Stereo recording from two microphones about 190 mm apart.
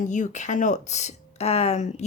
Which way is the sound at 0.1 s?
40° left (ahead or behind).